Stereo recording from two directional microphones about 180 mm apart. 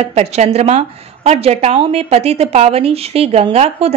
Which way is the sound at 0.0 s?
35° right (ahead or behind).